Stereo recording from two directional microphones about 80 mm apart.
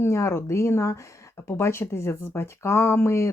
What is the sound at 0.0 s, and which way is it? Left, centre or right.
Speech, left.